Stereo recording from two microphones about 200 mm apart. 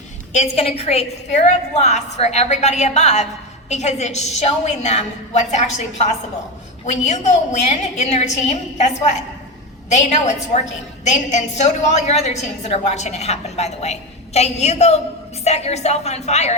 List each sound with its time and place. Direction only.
0.3 s a woman's voice: 30° left (ahead or behind)